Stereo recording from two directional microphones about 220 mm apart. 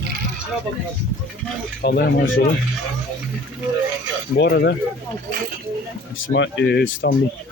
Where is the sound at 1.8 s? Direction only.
50° left (ahead or behind).